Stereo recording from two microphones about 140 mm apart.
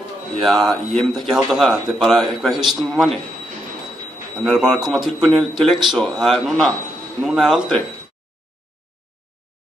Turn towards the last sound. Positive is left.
turn(degrees=0)  # may be behind; listen again after turning